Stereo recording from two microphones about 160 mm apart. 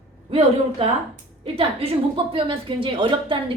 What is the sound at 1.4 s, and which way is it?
A woman's voice, 35° right (ahead or behind).